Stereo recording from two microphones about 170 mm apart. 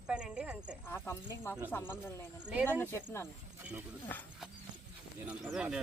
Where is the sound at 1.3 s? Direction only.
15° left (ahead or behind).